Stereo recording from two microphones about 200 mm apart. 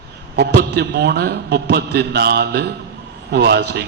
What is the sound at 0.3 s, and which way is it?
A man's voice, 55° right (ahead or behind).